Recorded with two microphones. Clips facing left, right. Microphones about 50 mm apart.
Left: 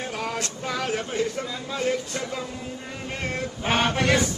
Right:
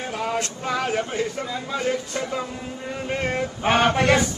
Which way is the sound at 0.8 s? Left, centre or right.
Centre.